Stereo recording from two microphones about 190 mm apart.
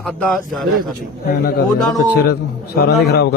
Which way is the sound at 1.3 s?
55° left (ahead or behind).